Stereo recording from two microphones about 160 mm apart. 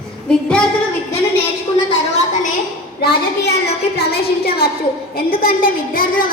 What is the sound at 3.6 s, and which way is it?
Music, 75° left (ahead or behind).